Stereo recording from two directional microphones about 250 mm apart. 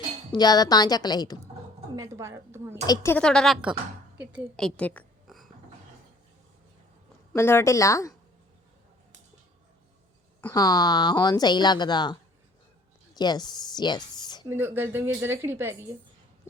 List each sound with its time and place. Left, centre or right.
0.3 s speech: centre
2.0 s speech: centre
2.8 s a woman's voice: centre
7.3 s speech: centre
10.4 s speech: centre
13.1 s speech: centre
14.2 s a sound: centre
14.4 s speech: centre